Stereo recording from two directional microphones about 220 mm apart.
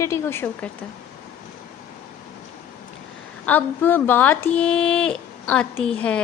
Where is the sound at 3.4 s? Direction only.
10° left (ahead or behind).